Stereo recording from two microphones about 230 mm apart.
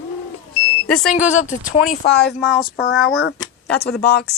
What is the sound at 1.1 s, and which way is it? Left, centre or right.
Speech, left.